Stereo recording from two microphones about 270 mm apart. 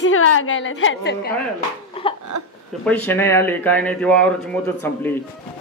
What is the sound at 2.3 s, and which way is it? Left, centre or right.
Speech, right.